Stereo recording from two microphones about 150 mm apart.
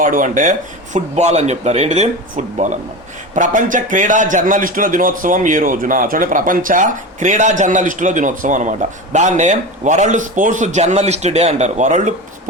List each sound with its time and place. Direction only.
0.0 s speech: 60° right (ahead or behind)
0.9 s speech: 45° right (ahead or behind)